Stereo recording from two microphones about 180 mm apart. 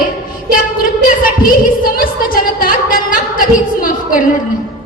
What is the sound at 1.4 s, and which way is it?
A woman's voice, 50° left (ahead or behind).